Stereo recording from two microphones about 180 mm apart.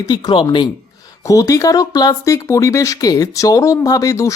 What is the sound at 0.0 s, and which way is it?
Speech, 20° left (ahead or behind).